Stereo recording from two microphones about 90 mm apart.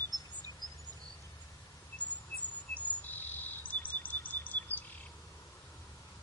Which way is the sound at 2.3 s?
20° left (ahead or behind).